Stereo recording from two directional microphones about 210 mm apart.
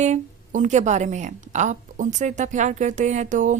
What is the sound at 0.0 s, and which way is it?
A woman's voice, 35° right (ahead or behind).